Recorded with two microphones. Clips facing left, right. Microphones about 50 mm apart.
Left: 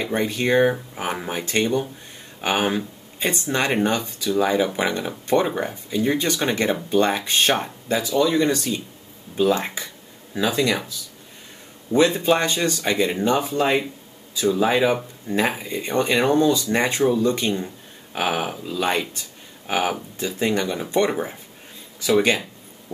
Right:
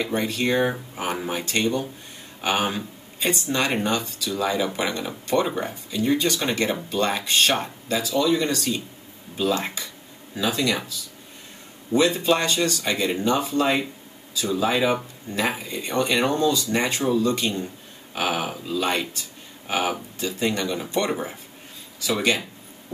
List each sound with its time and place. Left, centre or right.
0.0 s speech: centre
0.3 s speech: left
0.9 s speech: centre
11.9 s speech: left
15.3 s speech: left
18.1 s speech: centre
20.2 s speech: left
22.0 s speech: left